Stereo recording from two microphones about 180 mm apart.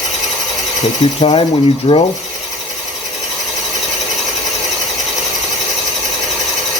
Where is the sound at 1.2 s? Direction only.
30° left (ahead or behind).